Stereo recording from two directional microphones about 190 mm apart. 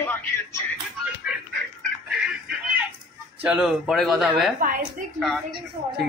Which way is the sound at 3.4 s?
5° right (ahead or behind).